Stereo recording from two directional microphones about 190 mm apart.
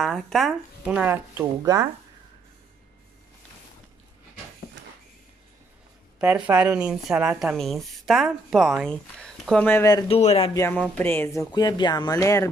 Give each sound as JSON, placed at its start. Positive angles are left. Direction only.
{"t": 0.0, "sound": "speech", "side_deg": 0}
{"t": 6.1, "sound": "speech", "side_deg": -5}
{"t": 10.0, "sound": "speech", "side_deg": 30}
{"t": 10.5, "sound": "speech", "side_deg": 10}